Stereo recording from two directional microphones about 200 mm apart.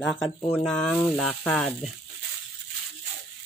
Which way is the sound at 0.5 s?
5° left (ahead or behind).